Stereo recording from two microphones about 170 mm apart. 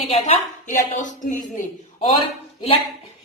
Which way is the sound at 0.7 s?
50° left (ahead or behind).